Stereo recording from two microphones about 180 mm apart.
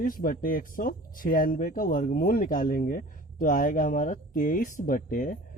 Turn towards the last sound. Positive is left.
turn(degrees=50)  # may be behind; listen again after turning